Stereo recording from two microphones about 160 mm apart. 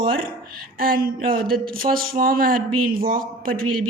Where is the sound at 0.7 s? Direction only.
65° right (ahead or behind).